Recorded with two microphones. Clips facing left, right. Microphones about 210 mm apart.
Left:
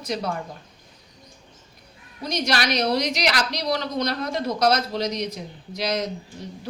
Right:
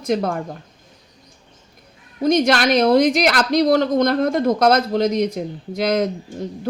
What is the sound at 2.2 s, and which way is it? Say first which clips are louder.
A woman's voice: right 9 dB; 50° right (ahead or behind).